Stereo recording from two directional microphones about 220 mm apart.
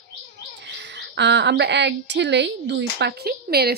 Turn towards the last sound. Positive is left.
turn(degrees=-45)  # may be behind; listen again after turning